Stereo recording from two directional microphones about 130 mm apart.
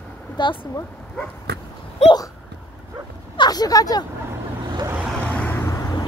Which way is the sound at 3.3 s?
30° left (ahead or behind).